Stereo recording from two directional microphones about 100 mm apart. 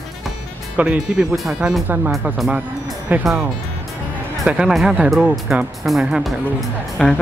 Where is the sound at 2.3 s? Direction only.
Centre (ahead or behind).